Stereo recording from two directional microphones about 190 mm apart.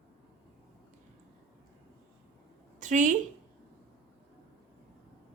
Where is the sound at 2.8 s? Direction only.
40° right (ahead or behind).